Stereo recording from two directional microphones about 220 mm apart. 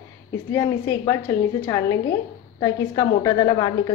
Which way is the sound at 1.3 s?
10° left (ahead or behind).